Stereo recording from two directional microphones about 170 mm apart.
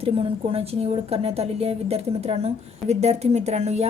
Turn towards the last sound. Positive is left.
turn(degrees=-40)  # may be behind; listen again after turning